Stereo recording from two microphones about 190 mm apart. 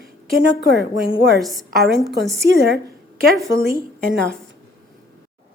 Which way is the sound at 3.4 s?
15° right (ahead or behind).